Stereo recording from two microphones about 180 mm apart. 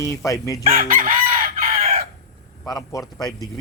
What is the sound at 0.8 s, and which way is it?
Chicken, 50° right (ahead or behind).